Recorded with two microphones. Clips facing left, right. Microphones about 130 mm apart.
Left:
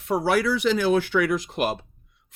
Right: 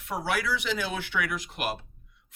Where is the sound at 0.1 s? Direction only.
40° left (ahead or behind).